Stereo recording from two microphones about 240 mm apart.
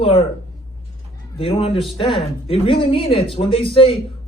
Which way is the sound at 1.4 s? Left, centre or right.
Left.